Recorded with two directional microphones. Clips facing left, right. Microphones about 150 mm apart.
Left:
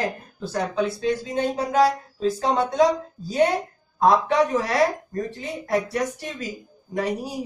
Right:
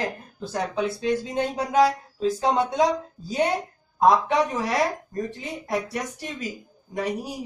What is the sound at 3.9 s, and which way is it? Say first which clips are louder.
Speech: left 1 dB; 15° right (ahead or behind).